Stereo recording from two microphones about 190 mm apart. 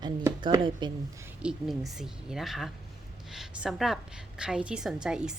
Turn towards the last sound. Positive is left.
turn(degrees=-5)  # may be behind; listen again after turning